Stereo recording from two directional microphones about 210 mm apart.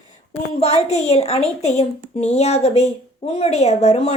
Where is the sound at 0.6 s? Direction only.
30° left (ahead or behind).